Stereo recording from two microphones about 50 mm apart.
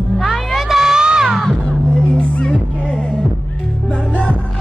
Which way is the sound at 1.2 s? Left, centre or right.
Centre.